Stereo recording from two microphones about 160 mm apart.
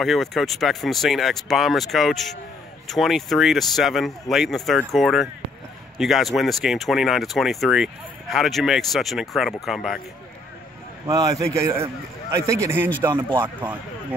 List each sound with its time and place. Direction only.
0.0 s speech: centre (ahead or behind)
11.1 s a man's voice: 20° right (ahead or behind)